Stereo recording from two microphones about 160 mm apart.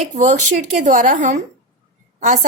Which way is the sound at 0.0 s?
50° right (ahead or behind).